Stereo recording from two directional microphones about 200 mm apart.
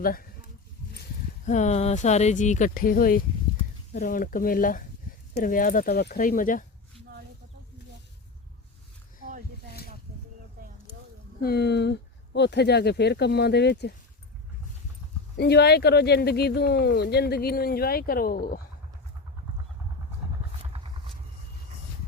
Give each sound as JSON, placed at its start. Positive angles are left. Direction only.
{"t": 0.0, "sound": "speech", "side_deg": 45}
{"t": 1.5, "sound": "speech", "side_deg": 35}
{"t": 11.3, "sound": "speech", "side_deg": 50}
{"t": 15.4, "sound": "speech", "side_deg": 55}